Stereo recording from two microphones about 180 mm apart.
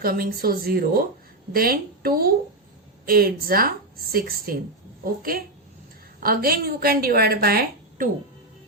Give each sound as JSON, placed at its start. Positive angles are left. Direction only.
{"t": 0.0, "sound": "a woman's voice", "side_deg": -55}